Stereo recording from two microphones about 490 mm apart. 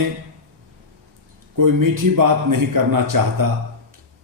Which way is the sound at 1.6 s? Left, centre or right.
Right.